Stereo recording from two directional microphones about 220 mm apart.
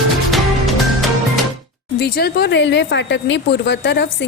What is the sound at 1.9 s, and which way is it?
A woman's voice, 45° left (ahead or behind).